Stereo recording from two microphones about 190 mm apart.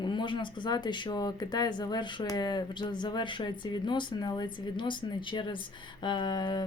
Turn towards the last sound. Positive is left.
turn(degrees=25)  # may be behind; listen again after turning